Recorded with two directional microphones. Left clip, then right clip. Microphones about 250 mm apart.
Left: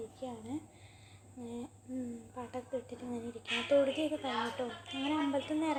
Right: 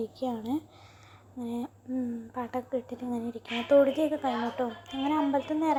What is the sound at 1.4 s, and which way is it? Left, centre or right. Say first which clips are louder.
A woman's voice: right 8 dB; right.